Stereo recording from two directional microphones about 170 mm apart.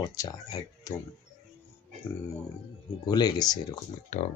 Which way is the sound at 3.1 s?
20° left (ahead or behind).